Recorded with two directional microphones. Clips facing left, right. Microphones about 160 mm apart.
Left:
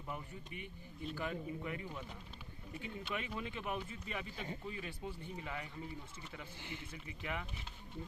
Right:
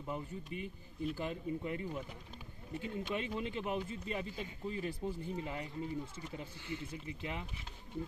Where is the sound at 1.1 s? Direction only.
30° right (ahead or behind).